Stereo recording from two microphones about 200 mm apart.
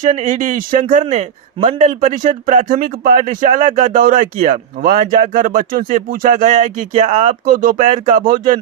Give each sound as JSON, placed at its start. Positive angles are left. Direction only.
{"t": 0.0, "sound": "speech", "side_deg": -35}